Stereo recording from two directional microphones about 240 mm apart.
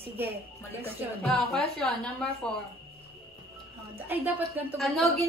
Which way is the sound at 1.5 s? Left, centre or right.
Centre.